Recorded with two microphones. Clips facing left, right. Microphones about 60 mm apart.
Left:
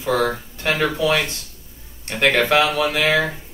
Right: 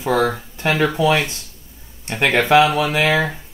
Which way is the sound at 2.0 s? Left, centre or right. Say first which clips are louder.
Right 1 dB; right.